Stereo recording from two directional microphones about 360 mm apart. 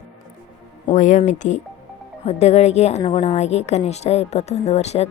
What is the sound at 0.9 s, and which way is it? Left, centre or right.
A woman's voice, left.